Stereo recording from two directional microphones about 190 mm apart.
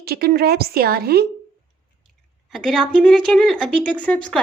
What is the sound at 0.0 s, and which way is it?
Speech, 55° right (ahead or behind).